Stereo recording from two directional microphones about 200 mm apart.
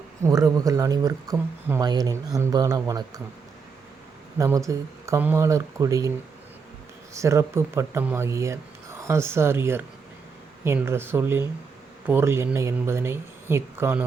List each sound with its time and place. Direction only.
0.2 s speech: 15° right (ahead or behind)
4.4 s speech: 15° right (ahead or behind)
7.1 s speech: 15° right (ahead or behind)